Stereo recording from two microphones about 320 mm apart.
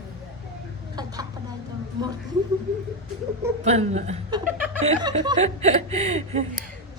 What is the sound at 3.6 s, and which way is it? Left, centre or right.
A woman's voice, right.